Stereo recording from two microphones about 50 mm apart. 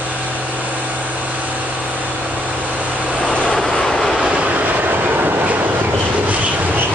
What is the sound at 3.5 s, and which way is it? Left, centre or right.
Train, centre.